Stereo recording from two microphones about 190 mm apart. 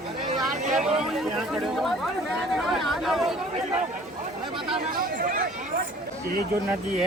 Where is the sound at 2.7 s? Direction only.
Centre (ahead or behind).